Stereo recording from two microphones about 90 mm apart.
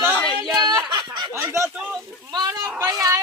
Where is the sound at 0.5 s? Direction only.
55° right (ahead or behind).